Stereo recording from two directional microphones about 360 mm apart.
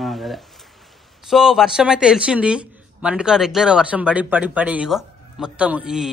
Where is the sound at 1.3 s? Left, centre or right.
Centre.